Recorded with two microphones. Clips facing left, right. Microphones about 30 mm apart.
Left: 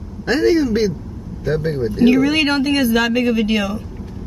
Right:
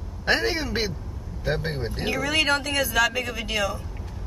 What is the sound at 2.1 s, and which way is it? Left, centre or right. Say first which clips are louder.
Speech: left 7 dB; centre.